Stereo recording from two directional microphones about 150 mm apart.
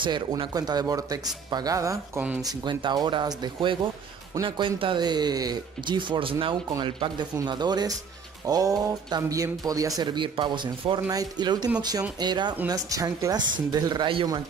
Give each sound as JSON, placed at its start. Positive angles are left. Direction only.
{"t": 0.0, "sound": "speech", "side_deg": -30}